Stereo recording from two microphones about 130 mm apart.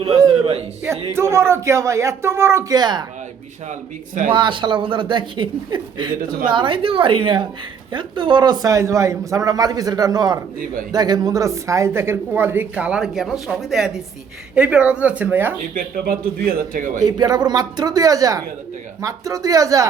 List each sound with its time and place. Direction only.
0.0 s a sound: 30° right (ahead or behind)
1.1 s a man's voice: 20° right (ahead or behind)
3.7 s a man's voice: 75° right (ahead or behind)
4.3 s a man's voice: 40° right (ahead or behind); by 15.5 s 15° right (ahead or behind)
15.7 s speech: 90° right
17.0 s a man's voice: 30° right (ahead or behind)